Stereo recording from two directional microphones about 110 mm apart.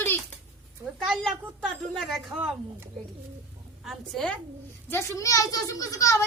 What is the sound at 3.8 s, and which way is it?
Speech, centre (ahead or behind).